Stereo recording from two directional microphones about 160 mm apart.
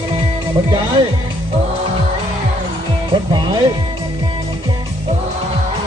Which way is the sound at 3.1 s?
25° right (ahead or behind).